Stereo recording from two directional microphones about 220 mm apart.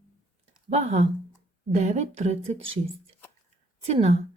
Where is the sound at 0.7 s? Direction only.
30° right (ahead or behind).